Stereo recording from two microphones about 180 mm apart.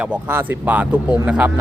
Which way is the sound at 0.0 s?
10° right (ahead or behind).